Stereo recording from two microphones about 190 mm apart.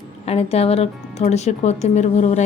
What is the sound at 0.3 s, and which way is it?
A woman's voice, 30° left (ahead or behind).